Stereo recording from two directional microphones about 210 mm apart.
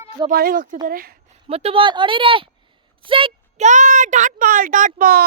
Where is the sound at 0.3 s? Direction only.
45° right (ahead or behind).